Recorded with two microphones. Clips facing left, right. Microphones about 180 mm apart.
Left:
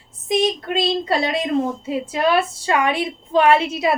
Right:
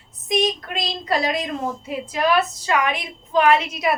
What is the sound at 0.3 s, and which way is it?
A woman's voice, 25° left (ahead or behind).